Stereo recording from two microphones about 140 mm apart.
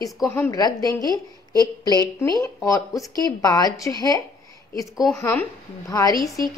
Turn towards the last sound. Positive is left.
turn(degrees=25)  # may be behind; listen again after turning